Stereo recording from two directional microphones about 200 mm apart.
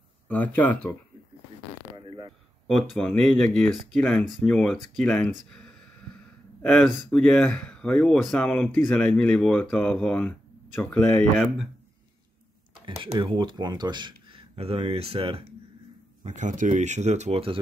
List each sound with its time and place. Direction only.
0.3 s speech: 10° left (ahead or behind)
2.0 s a sound: 25° right (ahead or behind)
2.6 s speech: 5° left (ahead or behind)
5.5 s a sound: 5° left (ahead or behind)
6.6 s speech: 5° left (ahead or behind)
12.8 s speech: 25° right (ahead or behind)
16.3 s speech: 40° right (ahead or behind)